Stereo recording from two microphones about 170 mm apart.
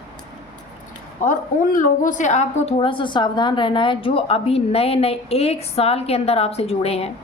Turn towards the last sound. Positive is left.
turn(degrees=35)  # may be behind; listen again after turning